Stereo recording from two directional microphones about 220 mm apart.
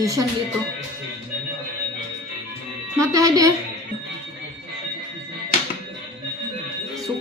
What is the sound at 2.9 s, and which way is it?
Speech, 15° right (ahead or behind).